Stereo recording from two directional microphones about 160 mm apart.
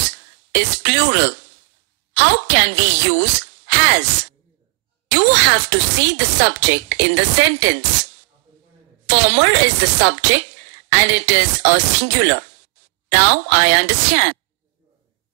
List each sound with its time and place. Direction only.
0.5 s speech: 90° right
5.0 s speech: 90° right
9.0 s speech: 90° right